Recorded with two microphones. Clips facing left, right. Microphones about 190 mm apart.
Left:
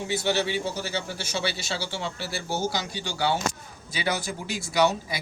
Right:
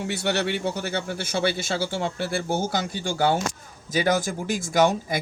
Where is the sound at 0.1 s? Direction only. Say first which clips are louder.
Left 1 dB; 65° right (ahead or behind).